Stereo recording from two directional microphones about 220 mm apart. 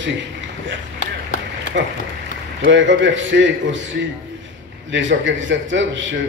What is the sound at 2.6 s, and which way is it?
A man's voice, 55° right (ahead or behind).